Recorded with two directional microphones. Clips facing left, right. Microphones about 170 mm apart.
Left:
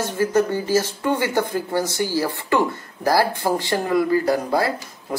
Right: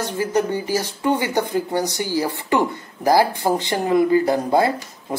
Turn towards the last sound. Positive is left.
turn(degrees=-20)  # may be behind; listen again after turning